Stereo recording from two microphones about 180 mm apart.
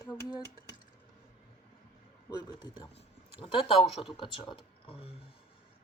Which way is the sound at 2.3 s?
25° left (ahead or behind).